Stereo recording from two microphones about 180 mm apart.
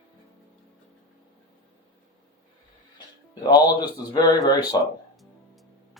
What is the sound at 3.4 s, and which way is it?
Speech, 20° left (ahead or behind).